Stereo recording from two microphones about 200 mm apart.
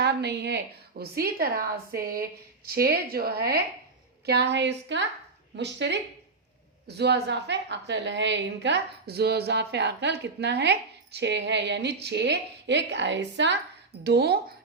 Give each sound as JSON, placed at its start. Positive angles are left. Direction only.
{"t": 0.0, "sound": "a woman's voice", "side_deg": -55}